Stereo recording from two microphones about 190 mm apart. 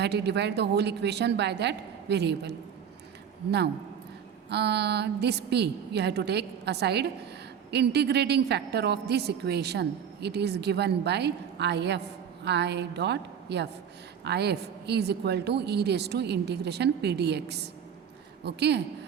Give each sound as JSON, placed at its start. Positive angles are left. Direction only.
{"t": 0.0, "sound": "a woman's voice", "side_deg": -60}
{"t": 4.4, "sound": "a woman's voice", "side_deg": -60}